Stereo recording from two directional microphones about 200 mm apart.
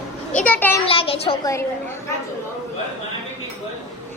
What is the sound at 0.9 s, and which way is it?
Speech, 30° left (ahead or behind).